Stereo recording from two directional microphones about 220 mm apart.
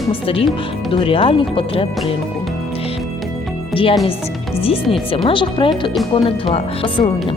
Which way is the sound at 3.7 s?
25° left (ahead or behind).